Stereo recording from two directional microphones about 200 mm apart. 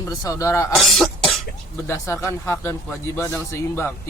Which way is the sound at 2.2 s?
10° left (ahead or behind).